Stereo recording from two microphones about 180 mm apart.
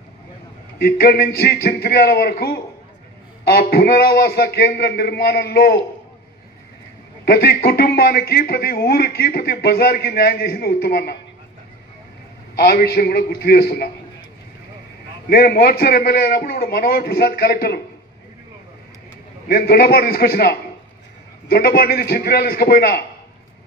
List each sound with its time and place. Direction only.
0.7 s speech: 60° left (ahead or behind)
7.2 s speech: 60° left (ahead or behind)
12.5 s speech: 60° left (ahead or behind)
15.2 s speech: 55° left (ahead or behind)
19.4 s speech: 60° left (ahead or behind)